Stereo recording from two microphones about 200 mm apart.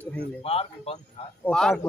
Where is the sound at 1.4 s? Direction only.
Centre (ahead or behind).